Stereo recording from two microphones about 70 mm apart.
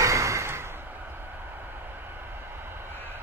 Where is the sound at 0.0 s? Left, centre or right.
Right.